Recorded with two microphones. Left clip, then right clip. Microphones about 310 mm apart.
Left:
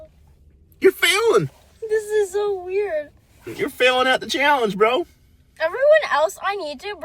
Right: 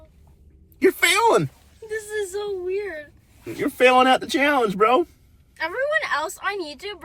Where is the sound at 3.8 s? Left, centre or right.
Centre.